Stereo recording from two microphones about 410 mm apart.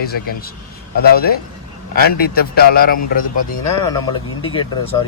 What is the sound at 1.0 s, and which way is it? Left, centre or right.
Speech, left.